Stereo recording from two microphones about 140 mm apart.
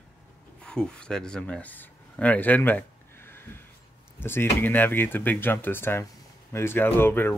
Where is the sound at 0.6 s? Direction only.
5° left (ahead or behind).